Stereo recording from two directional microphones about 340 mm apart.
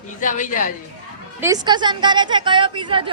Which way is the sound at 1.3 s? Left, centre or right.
Centre.